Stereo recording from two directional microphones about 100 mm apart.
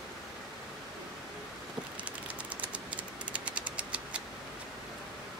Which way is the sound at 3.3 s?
10° right (ahead or behind).